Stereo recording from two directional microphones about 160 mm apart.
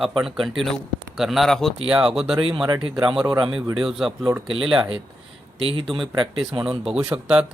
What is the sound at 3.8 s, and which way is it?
Speech, centre (ahead or behind).